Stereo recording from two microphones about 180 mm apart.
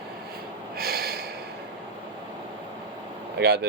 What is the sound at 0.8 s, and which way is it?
Snort, 60° right (ahead or behind).